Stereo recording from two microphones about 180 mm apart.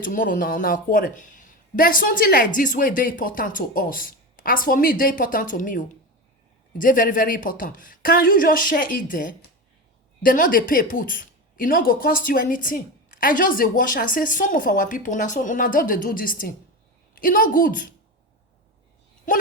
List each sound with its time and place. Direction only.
0.0 s speech: 50° left (ahead or behind)